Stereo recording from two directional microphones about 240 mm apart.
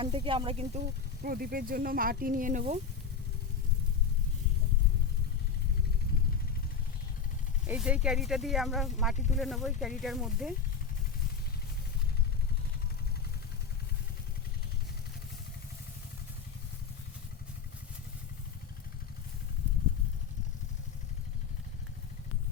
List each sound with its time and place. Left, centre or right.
0.0 s speech: right
1.2 s speech: right
7.7 s speech: centre